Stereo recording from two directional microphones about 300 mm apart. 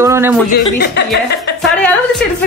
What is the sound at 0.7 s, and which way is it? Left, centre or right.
Speech, left.